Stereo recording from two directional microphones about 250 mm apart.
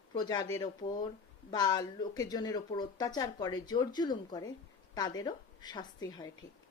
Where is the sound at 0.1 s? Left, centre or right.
Centre.